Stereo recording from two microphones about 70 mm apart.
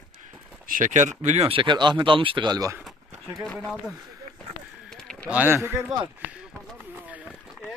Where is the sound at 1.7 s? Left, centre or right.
Right.